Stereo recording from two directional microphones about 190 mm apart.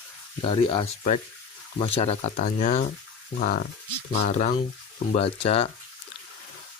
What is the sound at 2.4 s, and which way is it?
Speech, 40° left (ahead or behind).